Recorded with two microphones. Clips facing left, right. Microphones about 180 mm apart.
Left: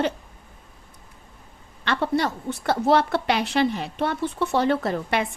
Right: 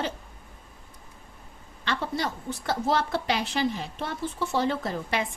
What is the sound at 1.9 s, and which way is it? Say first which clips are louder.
A woman's voice: left 6 dB; 65° left (ahead or behind).